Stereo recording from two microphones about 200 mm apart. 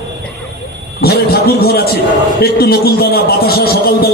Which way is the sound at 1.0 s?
50° left (ahead or behind).